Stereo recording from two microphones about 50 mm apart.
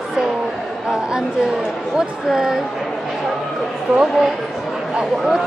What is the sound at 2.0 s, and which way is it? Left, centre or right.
Speech, centre.